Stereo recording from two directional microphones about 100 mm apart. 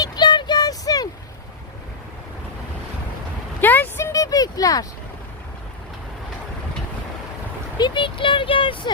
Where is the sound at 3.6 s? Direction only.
20° left (ahead or behind); by 4.9 s 35° left (ahead or behind).